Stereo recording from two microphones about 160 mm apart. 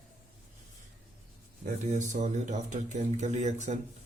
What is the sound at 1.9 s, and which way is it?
A man's voice, 50° right (ahead or behind).